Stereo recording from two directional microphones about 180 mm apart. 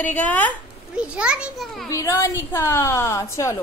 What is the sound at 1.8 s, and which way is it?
A woman's voice, 15° left (ahead or behind).